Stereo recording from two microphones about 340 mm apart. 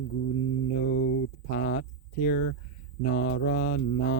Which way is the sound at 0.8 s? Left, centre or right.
Left.